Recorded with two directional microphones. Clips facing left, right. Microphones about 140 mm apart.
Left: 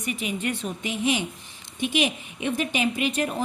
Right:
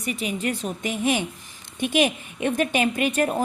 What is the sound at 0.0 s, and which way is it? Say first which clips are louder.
A woman's voice: right 2 dB; 35° right (ahead or behind).